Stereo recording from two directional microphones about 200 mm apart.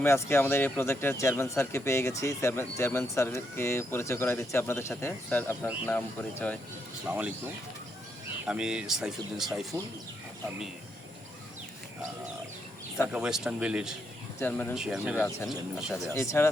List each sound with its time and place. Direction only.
0.0 s speech: 10° left (ahead or behind)
7.1 s speech: 5° right (ahead or behind)
9.7 s speech: 15° right (ahead or behind)
13.1 s speech: 5° right (ahead or behind)
14.3 s speech: 10° left (ahead or behind)
14.8 s speech: 5° right (ahead or behind)
15.1 s speech: 10° left (ahead or behind)
15.4 s speech: centre (ahead or behind)
16.1 s speech: 15° left (ahead or behind)